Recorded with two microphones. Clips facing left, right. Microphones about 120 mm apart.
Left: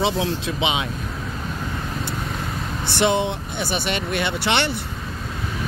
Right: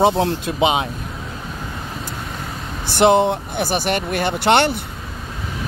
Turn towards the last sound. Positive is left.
turn(degrees=-50)  # may be behind; listen again after turning